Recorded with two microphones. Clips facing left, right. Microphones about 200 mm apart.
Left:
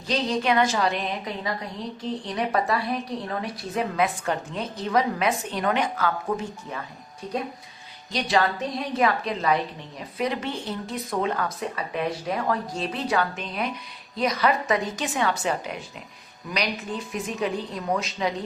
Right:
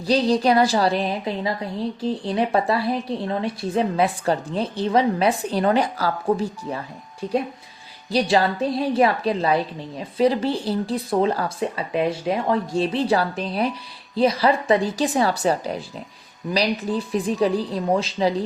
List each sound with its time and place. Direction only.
0.0 s a woman's voice: 35° right (ahead or behind)
8.1 s a woman's voice: 30° right (ahead or behind)